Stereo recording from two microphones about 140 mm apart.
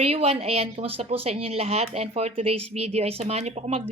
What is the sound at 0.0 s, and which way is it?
Speech, 45° right (ahead or behind).